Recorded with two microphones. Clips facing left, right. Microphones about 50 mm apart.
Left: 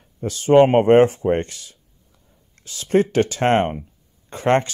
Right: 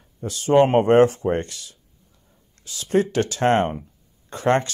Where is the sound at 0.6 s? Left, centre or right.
Left.